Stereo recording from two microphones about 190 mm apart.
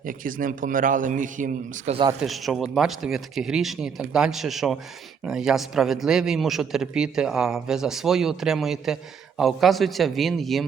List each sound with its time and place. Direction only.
0.0 s a man's voice: 45° right (ahead or behind)
2.2 s a man's voice: centre (ahead or behind)